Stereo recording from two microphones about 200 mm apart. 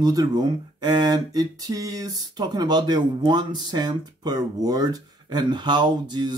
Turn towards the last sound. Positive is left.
turn(degrees=-20)  # may be behind; listen again after turning